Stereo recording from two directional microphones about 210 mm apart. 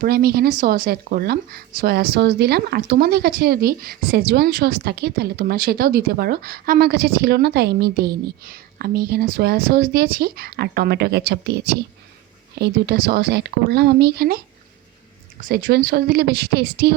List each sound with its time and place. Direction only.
0.0 s speech: 45° right (ahead or behind)